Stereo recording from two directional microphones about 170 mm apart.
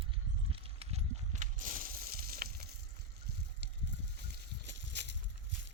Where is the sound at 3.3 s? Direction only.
75° right (ahead or behind).